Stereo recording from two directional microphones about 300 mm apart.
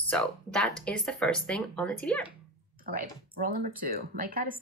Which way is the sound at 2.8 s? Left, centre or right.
Right.